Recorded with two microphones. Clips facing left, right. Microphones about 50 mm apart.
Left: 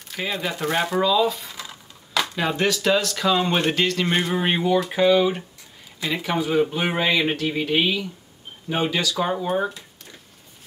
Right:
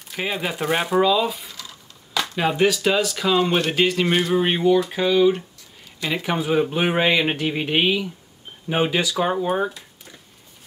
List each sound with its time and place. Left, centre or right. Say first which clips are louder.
0.2 s speech: right 1 dB; centre
4.3 s speech: right 3 dB; centre
6.2 s speech: even; centre